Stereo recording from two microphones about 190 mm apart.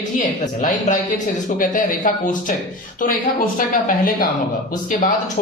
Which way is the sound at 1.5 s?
45° left (ahead or behind).